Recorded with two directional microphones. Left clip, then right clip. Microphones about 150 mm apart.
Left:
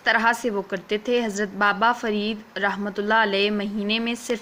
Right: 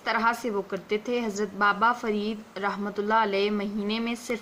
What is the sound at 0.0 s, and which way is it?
A woman's voice, 25° left (ahead or behind).